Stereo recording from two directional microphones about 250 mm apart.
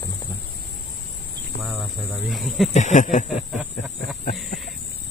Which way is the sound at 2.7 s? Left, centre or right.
Left.